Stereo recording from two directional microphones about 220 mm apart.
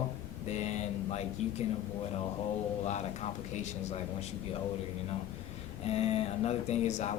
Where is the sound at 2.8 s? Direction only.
30° left (ahead or behind).